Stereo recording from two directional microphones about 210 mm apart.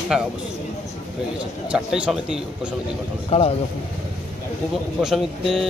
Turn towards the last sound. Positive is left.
turn(degrees=0)  # may be behind; listen again after turning